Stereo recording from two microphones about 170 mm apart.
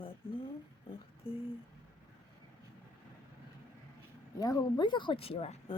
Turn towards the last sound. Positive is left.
turn(degrees=35)  # may be behind; listen again after turning